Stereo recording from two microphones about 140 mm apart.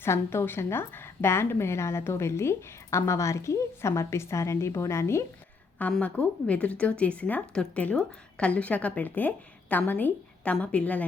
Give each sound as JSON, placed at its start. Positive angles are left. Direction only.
{"t": 0.0, "sound": "a woman's voice", "side_deg": 20}